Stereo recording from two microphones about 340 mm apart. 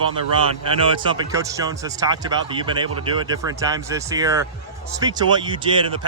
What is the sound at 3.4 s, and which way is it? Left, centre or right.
Speech, centre.